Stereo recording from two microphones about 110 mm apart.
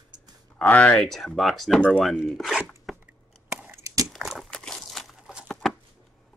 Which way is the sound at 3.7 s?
30° right (ahead or behind).